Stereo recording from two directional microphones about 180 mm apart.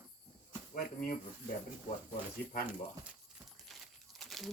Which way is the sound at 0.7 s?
50° left (ahead or behind).